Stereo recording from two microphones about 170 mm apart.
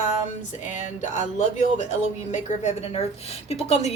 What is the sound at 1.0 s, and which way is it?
Speech, 45° left (ahead or behind).